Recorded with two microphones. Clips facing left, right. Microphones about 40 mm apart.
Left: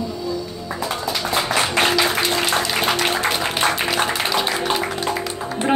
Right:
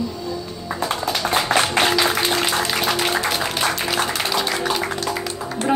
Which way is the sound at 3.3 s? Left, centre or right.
Left.